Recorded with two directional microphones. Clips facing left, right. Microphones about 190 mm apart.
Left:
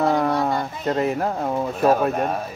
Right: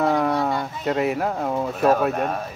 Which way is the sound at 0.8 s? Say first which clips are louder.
Even; 5° right (ahead or behind).